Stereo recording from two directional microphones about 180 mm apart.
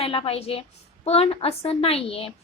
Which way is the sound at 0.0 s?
30° left (ahead or behind).